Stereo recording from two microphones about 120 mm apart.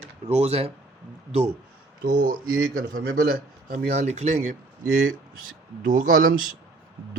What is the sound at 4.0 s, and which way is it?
Speech, 70° right (ahead or behind).